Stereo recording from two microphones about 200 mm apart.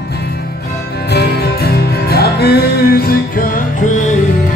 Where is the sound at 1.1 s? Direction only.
55° left (ahead or behind).